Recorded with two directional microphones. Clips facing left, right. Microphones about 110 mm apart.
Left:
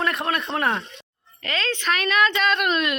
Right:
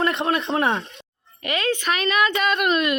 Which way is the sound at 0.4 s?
Centre (ahead or behind).